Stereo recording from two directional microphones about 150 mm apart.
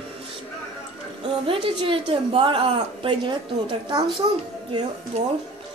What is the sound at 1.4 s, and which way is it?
A woman's voice, 35° right (ahead or behind).